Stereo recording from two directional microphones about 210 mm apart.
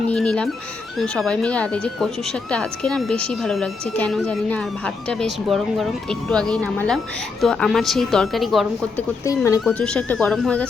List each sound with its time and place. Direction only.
0.1 s music: 5° left (ahead or behind)
0.9 s speech: centre (ahead or behind)
9.2 s speech: 15° left (ahead or behind)